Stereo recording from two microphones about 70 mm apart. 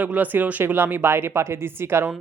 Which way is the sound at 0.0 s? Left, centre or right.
Right.